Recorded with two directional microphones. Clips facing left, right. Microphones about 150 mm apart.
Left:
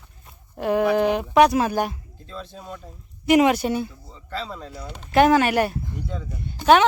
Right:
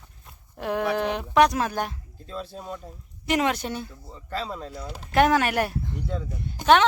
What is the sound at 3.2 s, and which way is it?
Speech, 10° left (ahead or behind).